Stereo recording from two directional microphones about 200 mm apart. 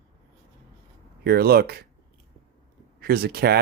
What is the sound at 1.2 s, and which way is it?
Speech, 50° right (ahead or behind).